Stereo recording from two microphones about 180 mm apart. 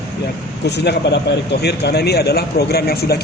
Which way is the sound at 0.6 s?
70° left (ahead or behind).